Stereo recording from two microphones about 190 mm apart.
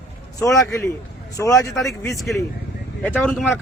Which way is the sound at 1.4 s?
15° left (ahead or behind).